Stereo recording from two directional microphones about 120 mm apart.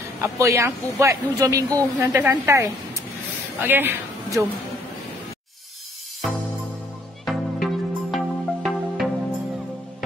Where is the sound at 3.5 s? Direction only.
15° right (ahead or behind).